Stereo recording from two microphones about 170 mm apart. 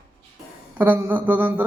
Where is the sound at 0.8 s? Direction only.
10° right (ahead or behind).